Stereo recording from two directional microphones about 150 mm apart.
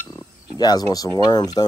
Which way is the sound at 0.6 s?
25° left (ahead or behind).